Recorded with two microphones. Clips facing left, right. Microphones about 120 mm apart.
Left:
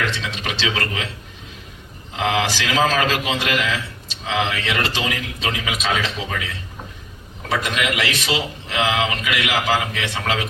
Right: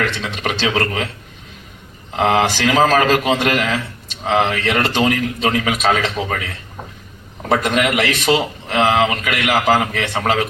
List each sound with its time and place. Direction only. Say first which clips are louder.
0.0 s a man's voice: right 4 dB; 55° right (ahead or behind)
2.1 s a man's voice: right 5 dB; 50° right (ahead or behind)
7.5 s a man's voice: right 6 dB; 50° right (ahead or behind)